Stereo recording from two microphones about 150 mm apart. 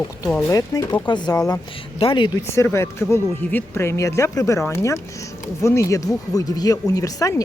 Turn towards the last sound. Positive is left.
turn(degrees=25)  # may be behind; listen again after turning